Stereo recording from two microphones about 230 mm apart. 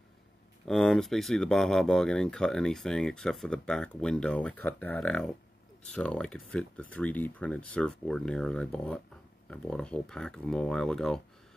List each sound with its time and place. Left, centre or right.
0.7 s speech: centre